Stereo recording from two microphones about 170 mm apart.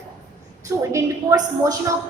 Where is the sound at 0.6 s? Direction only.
20° right (ahead or behind).